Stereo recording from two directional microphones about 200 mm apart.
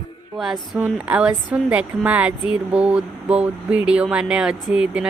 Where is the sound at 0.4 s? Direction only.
Centre (ahead or behind).